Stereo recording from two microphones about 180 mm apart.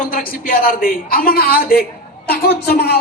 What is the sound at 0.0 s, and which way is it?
A man's voice, 50° left (ahead or behind).